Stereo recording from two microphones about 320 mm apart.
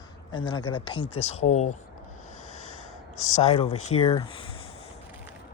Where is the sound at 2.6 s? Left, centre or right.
Left.